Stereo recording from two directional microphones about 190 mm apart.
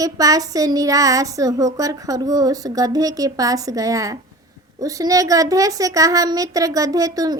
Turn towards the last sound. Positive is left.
turn(degrees=-20)  # may be behind; listen again after turning